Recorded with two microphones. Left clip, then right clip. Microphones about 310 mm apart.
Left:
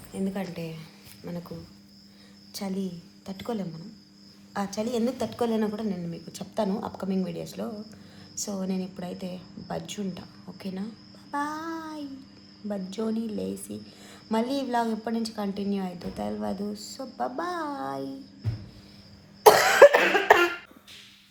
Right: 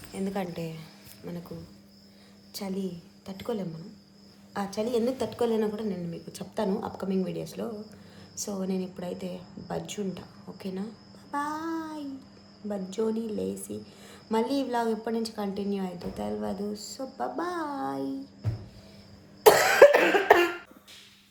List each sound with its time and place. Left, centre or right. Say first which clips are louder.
0.1 s a woman's voice: even; centre
19.4 s cough: left 2 dB; centre